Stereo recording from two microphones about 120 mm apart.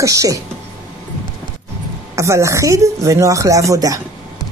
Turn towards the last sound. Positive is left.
turn(degrees=-30)  # may be behind; listen again after turning